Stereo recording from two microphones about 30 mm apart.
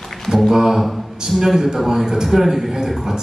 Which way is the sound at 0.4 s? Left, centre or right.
Centre.